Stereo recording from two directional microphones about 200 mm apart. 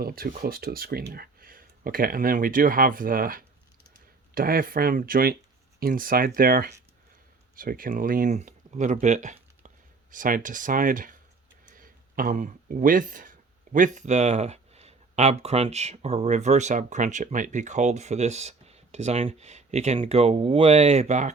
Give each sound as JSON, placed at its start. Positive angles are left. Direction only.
{"t": 0.0, "sound": "speech", "side_deg": -45}
{"t": 11.6, "sound": "a sound", "side_deg": -45}
{"t": 13.7, "sound": "speech", "side_deg": -40}